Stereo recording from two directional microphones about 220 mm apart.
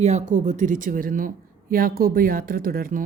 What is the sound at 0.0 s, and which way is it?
A woman's voice, 30° right (ahead or behind).